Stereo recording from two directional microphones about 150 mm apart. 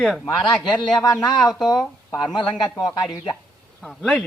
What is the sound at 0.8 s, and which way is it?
Speech, 25° left (ahead or behind).